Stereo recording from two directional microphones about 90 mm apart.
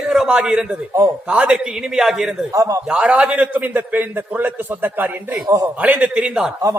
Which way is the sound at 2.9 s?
10° right (ahead or behind).